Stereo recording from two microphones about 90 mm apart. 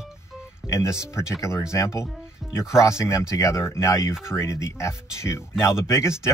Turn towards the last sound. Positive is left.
turn(degrees=30)  # may be behind; listen again after turning